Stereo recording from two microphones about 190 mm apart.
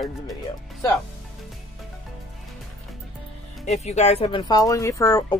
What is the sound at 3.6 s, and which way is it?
Speech, 35° left (ahead or behind).